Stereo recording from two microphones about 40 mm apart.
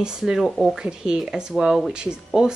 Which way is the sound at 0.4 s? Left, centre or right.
Centre.